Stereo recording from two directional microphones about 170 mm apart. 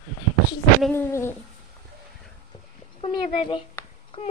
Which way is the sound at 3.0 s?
30° left (ahead or behind).